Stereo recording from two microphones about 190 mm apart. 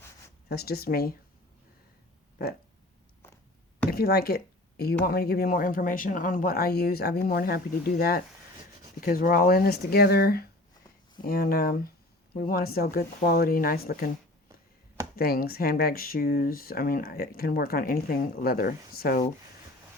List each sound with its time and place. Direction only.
0.4 s speech: 55° left (ahead or behind)
3.8 s speech: 55° left (ahead or behind)
15.1 s speech: 50° left (ahead or behind)